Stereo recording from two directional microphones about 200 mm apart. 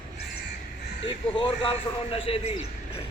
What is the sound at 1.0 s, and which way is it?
A man's voice, 25° left (ahead or behind).